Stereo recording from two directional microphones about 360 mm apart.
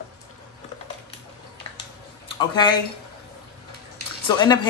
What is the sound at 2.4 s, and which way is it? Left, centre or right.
Speech, centre.